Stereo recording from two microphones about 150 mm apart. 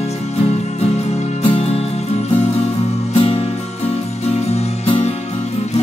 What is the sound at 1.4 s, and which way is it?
Music, 40° left (ahead or behind).